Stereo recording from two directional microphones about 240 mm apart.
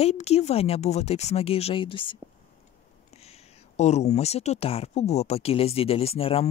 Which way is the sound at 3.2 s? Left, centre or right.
Left.